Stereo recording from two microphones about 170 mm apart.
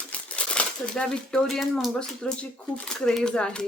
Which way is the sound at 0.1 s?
5° left (ahead or behind).